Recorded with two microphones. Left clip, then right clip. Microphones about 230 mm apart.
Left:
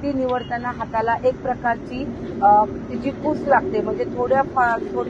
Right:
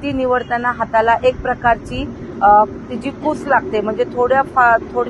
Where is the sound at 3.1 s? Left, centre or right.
Right.